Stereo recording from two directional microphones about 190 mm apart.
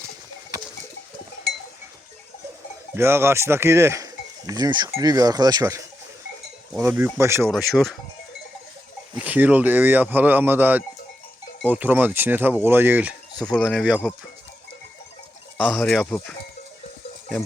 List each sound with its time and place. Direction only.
2.9 s speech: 15° right (ahead or behind)
7.5 s speech: centre (ahead or behind)
9.1 s speech: 10° right (ahead or behind)
15.5 s speech: centre (ahead or behind)